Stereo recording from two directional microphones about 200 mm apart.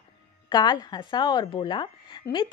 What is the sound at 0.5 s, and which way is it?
A woman's voice, 20° left (ahead or behind).